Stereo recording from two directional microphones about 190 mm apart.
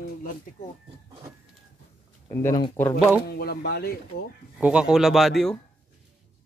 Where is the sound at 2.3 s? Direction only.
15° left (ahead or behind).